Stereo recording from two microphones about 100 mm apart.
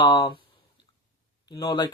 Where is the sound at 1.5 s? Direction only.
45° left (ahead or behind).